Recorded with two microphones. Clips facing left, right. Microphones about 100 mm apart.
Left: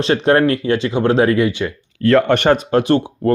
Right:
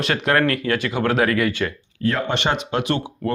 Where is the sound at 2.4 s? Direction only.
45° left (ahead or behind).